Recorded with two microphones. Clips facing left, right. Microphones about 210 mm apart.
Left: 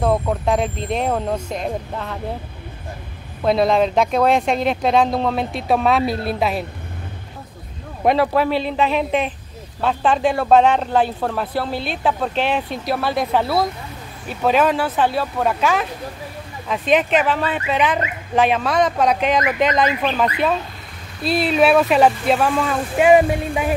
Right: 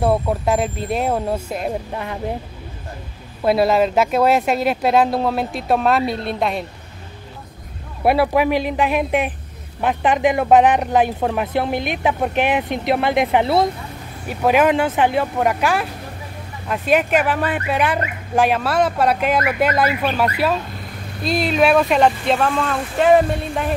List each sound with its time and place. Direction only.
0.0 s speech: 5° right (ahead or behind)
3.4 s speech: 5° right (ahead or behind)
8.0 s speech: 10° right (ahead or behind)
21.2 s speech: 5° left (ahead or behind)